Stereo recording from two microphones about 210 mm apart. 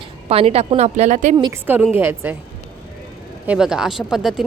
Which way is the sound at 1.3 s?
15° right (ahead or behind).